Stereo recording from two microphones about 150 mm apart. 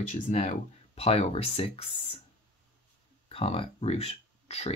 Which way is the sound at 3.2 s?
40° left (ahead or behind).